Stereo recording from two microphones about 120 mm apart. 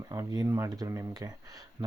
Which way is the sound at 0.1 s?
30° right (ahead or behind).